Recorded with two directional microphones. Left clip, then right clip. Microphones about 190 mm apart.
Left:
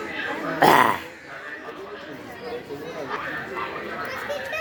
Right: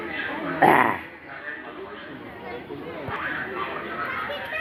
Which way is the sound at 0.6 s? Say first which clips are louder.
Left 1 dB; 35° left (ahead or behind).